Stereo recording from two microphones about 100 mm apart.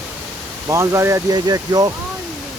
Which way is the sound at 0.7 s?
30° right (ahead or behind).